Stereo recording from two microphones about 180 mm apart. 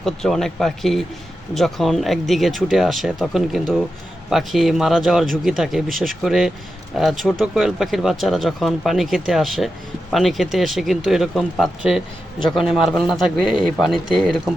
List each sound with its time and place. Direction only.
0.0 s speech: centre (ahead or behind)